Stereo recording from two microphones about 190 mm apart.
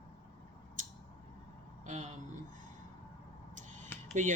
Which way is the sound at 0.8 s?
40° right (ahead or behind).